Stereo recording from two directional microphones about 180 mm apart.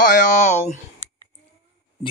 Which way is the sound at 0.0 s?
45° left (ahead or behind).